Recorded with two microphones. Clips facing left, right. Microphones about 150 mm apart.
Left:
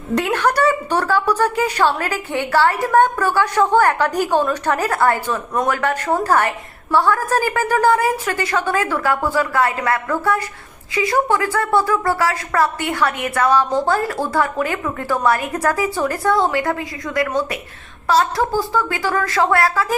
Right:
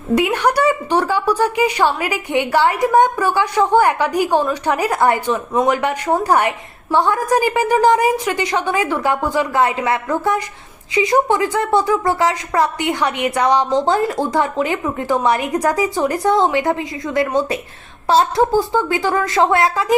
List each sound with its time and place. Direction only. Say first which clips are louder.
0.1 s a woman's voice: right 2 dB; 10° right (ahead or behind)